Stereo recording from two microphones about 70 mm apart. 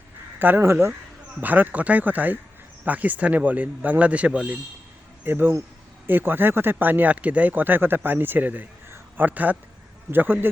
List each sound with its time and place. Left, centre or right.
0.3 s speech: right
1.4 s speech: right
5.2 s speech: right
8.9 s a sound: right
10.1 s speech: right